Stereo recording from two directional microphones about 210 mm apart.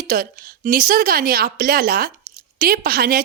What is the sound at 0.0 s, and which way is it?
A woman's voice, 40° right (ahead or behind).